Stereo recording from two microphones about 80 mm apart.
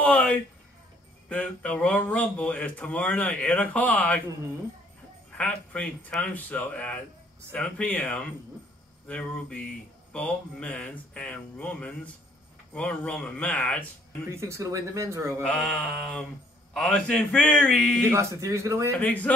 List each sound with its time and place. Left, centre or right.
0.0 s a sound: centre
1.3 s speech: centre
5.4 s speech: centre
14.3 s speech: right
15.4 s speech: centre
18.1 s speech: right
18.9 s speech: centre